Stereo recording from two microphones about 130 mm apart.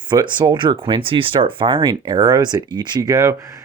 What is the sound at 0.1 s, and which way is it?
Speech, 30° right (ahead or behind).